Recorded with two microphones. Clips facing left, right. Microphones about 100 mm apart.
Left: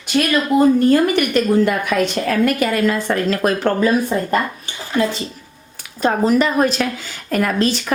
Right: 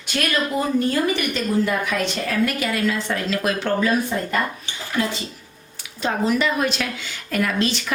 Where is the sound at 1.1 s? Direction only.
60° left (ahead or behind).